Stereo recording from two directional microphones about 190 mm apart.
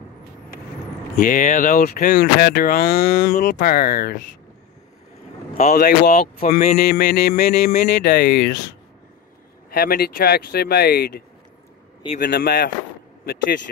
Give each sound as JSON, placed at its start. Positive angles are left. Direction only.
{"t": 1.1, "sound": "speech", "side_deg": 45}
{"t": 2.1, "sound": "speech", "side_deg": 55}
{"t": 5.5, "sound": "speech", "side_deg": 35}
{"t": 9.7, "sound": "speech", "side_deg": 55}